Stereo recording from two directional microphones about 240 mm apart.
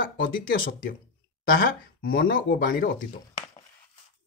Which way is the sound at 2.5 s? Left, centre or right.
Left.